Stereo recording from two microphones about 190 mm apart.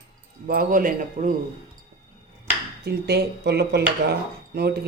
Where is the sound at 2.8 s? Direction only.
60° right (ahead or behind).